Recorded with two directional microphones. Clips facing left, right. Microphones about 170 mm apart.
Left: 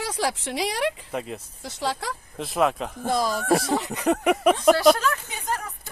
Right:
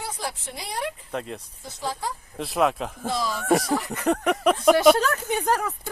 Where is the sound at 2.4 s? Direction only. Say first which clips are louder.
Even; centre (ahead or behind).